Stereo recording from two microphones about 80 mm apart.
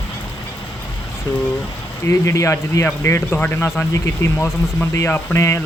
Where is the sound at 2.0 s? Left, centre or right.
Left.